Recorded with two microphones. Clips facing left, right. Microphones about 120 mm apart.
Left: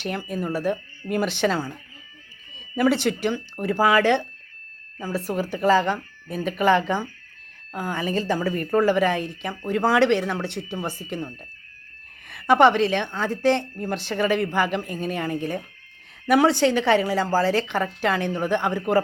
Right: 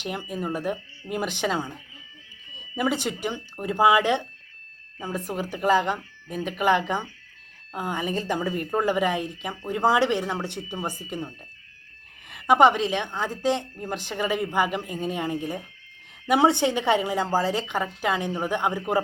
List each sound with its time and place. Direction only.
0.0 s a woman's voice: 15° right (ahead or behind)
2.7 s a woman's voice: 15° right (ahead or behind)
3.0 s speech: 80° left
3.2 s a woman's voice: 20° right (ahead or behind)
12.3 s a woman's voice: 15° right (ahead or behind)